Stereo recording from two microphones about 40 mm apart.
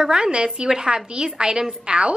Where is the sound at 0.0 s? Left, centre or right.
Centre.